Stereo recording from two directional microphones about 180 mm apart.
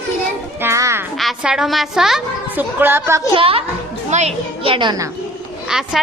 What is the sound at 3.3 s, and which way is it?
A woman's voice, 30° right (ahead or behind).